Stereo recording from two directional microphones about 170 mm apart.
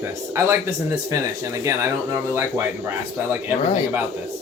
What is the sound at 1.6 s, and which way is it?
Speech, 15° right (ahead or behind).